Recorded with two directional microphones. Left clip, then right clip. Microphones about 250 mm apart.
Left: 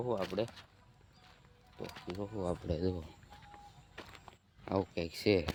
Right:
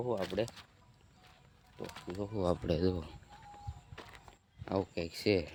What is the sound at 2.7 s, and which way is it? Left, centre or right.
Speech, right.